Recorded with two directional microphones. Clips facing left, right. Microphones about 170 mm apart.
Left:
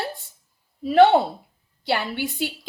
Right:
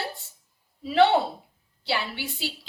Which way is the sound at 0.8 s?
50° left (ahead or behind).